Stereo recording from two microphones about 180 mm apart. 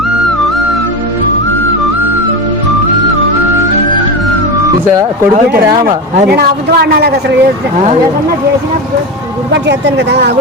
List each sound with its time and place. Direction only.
5.8 s speech: 55° right (ahead or behind)
9.5 s speech: 75° right (ahead or behind)